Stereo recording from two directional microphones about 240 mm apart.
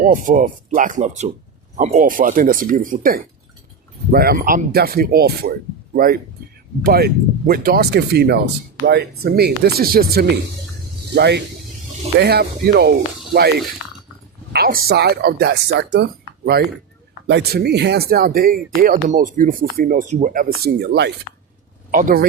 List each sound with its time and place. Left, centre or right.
0.0 s speech: right